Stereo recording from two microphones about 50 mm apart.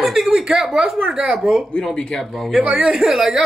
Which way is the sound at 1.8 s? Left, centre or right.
Centre.